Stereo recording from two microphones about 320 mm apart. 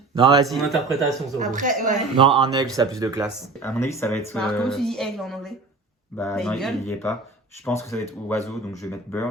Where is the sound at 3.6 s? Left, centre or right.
Centre.